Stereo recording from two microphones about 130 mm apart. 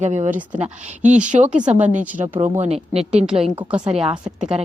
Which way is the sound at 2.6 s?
55° right (ahead or behind).